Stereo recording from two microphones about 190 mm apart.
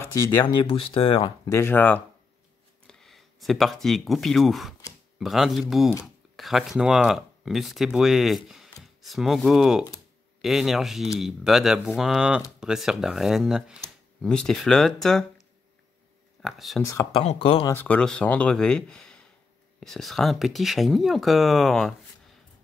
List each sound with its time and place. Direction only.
0.4 s speech: 25° left (ahead or behind)
1.5 s speech: 10° left (ahead or behind)
16.4 s speech: centre (ahead or behind)
16.8 s speech: 15° left (ahead or behind)
17.2 s speech: 30° left (ahead or behind)
17.6 s speech: 10° left (ahead or behind)